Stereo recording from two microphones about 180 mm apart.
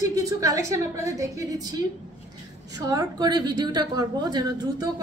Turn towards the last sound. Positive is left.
turn(degrees=-25)  # may be behind; listen again after turning